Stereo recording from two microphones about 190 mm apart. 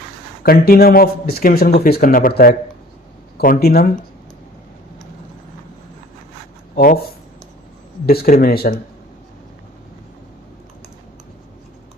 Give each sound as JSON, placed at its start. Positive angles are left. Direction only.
{"t": 0.4, "sound": "speech", "side_deg": 50}
{"t": 6.7, "sound": "speech", "side_deg": 50}
{"t": 8.0, "sound": "speech", "side_deg": 55}